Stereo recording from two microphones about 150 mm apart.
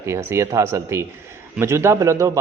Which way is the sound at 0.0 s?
20° right (ahead or behind).